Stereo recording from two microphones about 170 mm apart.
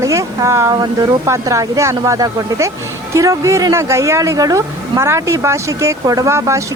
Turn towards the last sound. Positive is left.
turn(degrees=-15)  # may be behind; listen again after turning